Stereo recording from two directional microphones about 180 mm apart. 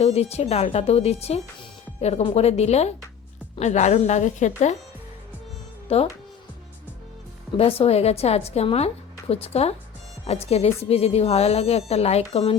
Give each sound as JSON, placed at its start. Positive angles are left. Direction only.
{"t": 0.0, "sound": "a woman's voice", "side_deg": 35}
{"t": 5.9, "sound": "a woman's voice", "side_deg": 35}
{"t": 7.5, "sound": "a woman's voice", "side_deg": 30}